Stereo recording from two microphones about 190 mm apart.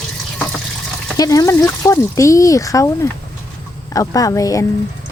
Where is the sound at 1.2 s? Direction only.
20° left (ahead or behind).